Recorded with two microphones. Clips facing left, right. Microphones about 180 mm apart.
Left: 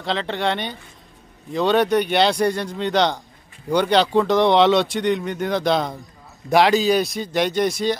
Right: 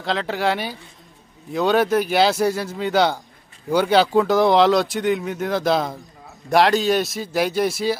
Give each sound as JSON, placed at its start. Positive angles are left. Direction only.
{"t": 0.0, "sound": "speech", "side_deg": 0}